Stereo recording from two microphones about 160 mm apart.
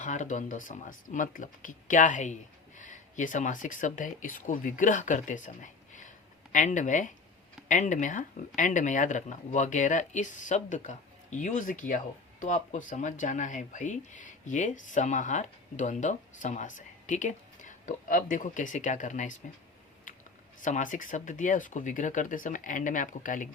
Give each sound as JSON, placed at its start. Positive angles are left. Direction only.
{"t": 0.0, "sound": "speech", "side_deg": 50}
{"t": 20.6, "sound": "speech", "side_deg": 50}